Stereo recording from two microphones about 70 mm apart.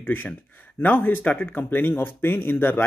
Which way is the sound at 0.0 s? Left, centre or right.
Left.